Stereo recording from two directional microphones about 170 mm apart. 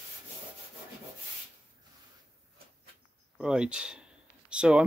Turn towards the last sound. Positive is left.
turn(degrees=-5)  # may be behind; listen again after turning